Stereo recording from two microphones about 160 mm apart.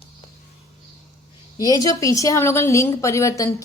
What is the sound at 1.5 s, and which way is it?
A woman's voice, 25° left (ahead or behind).